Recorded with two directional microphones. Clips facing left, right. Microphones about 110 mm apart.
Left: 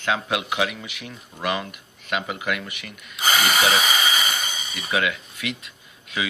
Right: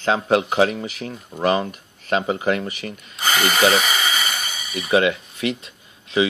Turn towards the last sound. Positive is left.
turn(degrees=-30)  # may be behind; listen again after turning